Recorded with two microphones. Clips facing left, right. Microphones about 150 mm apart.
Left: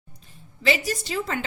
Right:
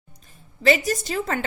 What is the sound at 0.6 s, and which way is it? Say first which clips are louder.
Speech: right 4 dB; 45° right (ahead or behind).